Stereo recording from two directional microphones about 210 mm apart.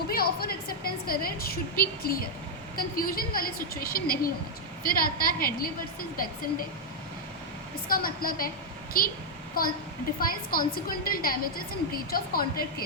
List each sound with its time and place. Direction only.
0.1 s a woman's voice: 45° left (ahead or behind)
7.9 s a woman's voice: 45° left (ahead or behind)